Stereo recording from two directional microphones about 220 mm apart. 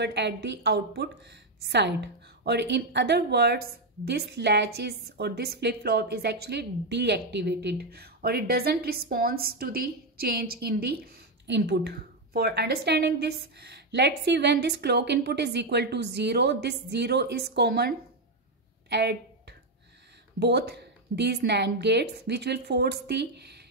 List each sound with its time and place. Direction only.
0.0 s a woman's voice: 50° right (ahead or behind)
18.9 s a sound: 50° right (ahead or behind)
20.3 s a woman's voice: 50° right (ahead or behind)